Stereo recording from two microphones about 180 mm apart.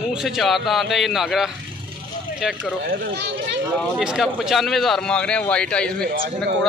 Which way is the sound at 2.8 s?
60° right (ahead or behind).